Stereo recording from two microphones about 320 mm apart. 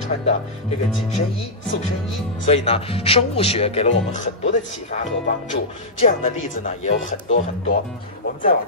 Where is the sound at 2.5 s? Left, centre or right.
Centre.